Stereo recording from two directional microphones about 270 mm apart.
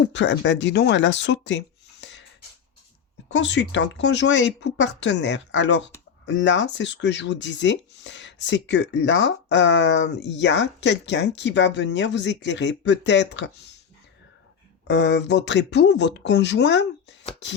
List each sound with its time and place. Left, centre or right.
0.1 s speech: left
3.2 s speech: left
14.8 s speech: left